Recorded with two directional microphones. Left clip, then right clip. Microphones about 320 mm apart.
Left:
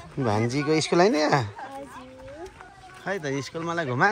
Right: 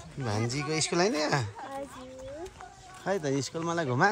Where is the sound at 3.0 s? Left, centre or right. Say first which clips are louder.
Left 1 dB; centre.